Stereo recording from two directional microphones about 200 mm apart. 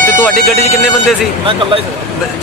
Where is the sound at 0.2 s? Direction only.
Centre (ahead or behind).